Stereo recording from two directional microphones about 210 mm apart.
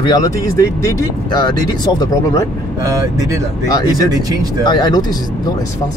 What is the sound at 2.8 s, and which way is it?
Speech, 15° right (ahead or behind).